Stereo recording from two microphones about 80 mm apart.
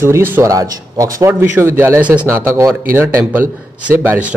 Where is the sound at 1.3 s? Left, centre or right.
Right.